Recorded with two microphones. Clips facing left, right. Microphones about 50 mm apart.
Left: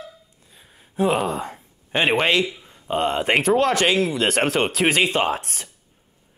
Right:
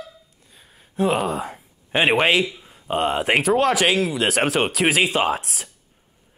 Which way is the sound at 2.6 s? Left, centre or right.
Centre.